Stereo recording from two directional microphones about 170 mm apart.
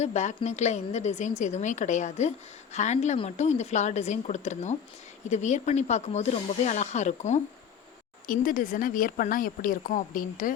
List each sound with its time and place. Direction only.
0.0 s a woman's voice: 40° left (ahead or behind)
8.3 s speech: 55° left (ahead or behind)